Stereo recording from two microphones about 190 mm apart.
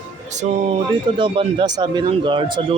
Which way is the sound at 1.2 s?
25° right (ahead or behind).